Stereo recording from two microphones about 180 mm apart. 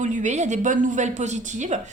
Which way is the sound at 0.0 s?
45° right (ahead or behind).